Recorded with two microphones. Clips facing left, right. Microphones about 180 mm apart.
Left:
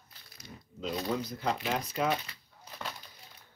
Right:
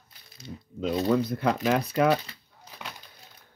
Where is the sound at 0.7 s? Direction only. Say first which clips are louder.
Right 9 dB; 55° right (ahead or behind).